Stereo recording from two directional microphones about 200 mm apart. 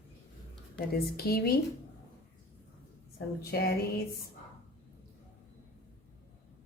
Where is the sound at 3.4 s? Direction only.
50° left (ahead or behind).